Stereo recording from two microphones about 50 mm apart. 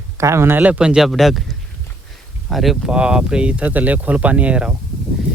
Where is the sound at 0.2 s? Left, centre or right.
Right.